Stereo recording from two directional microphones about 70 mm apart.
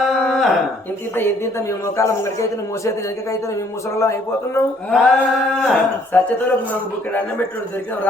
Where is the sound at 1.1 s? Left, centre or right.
Left.